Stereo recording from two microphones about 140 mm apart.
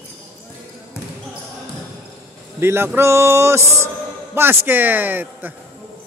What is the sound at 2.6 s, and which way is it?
A man's voice, 15° right (ahead or behind).